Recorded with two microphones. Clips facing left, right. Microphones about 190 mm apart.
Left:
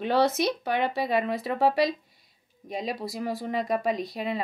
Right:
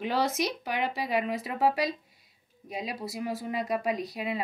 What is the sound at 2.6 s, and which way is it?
Speech, 5° right (ahead or behind).